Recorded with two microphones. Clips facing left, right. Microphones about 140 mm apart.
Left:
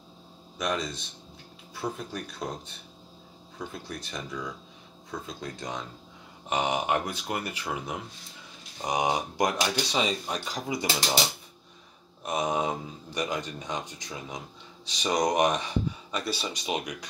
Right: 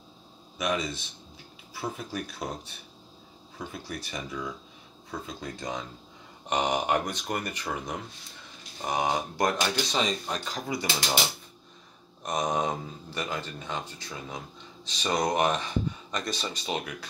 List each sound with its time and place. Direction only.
0.6 s speech: 5° right (ahead or behind)
3.5 s speech: 5° right (ahead or behind)
8.8 s speech: 15° left (ahead or behind)
12.2 s speech: 5° left (ahead or behind)